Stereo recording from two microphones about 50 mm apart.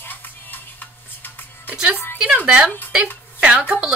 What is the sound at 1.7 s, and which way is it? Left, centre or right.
Speech, right.